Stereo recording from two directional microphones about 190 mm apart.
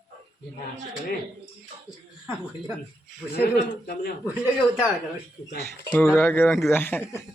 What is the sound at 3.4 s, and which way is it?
Speech, 55° left (ahead or behind).